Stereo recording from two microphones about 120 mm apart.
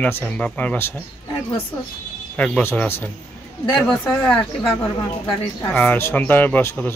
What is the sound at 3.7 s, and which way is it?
Speech, centre (ahead or behind).